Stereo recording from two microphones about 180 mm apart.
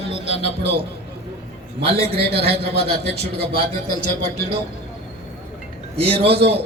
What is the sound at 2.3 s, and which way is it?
Speech, 65° right (ahead or behind).